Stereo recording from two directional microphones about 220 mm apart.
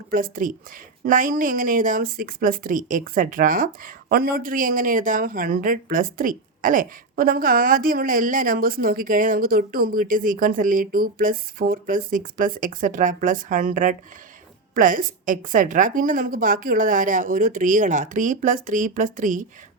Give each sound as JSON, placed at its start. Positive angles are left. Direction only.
{"t": 0.1, "sound": "a woman's voice", "side_deg": -40}